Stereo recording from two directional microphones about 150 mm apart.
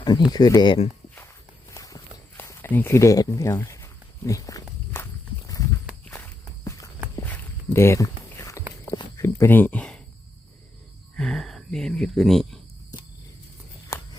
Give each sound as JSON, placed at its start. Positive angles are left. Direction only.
{"t": 0.0, "sound": "speech", "side_deg": 30}
{"t": 1.7, "sound": "walk", "side_deg": 25}
{"t": 2.4, "sound": "a sound", "side_deg": 15}
{"t": 6.7, "sound": "walk", "side_deg": 20}
{"t": 8.8, "sound": "speech", "side_deg": 25}
{"t": 11.2, "sound": "speech", "side_deg": 0}
{"t": 13.9, "sound": "walk", "side_deg": 20}